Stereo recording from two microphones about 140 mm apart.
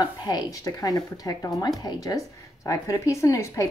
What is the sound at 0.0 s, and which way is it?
A woman's voice, 30° left (ahead or behind).